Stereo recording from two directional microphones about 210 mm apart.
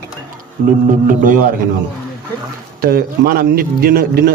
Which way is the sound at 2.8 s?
45° right (ahead or behind).